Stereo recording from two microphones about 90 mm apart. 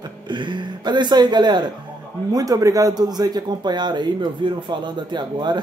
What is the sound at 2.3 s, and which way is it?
Speech, 40° right (ahead or behind).